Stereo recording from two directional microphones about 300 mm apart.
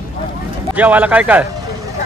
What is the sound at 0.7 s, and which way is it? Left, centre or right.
Speech, centre.